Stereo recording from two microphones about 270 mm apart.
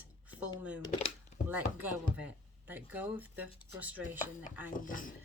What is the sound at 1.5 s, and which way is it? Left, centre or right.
Speech, centre.